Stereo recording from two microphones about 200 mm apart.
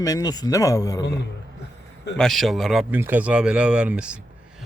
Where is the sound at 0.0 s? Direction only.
20° left (ahead or behind).